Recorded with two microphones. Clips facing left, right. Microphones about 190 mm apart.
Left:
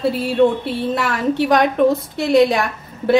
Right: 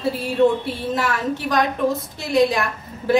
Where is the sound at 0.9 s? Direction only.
65° left (ahead or behind).